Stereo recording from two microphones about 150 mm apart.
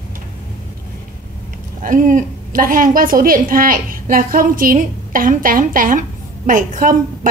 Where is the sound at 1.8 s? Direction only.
60° right (ahead or behind).